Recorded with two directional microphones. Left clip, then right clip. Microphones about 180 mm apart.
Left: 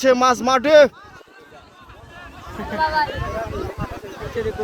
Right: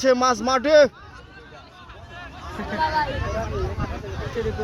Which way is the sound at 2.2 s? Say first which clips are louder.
Left 1 dB; centre (ahead or behind).